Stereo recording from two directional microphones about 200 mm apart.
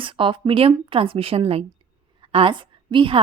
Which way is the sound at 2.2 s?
25° right (ahead or behind).